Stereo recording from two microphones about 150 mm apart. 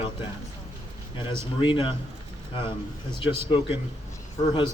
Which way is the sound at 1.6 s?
30° left (ahead or behind).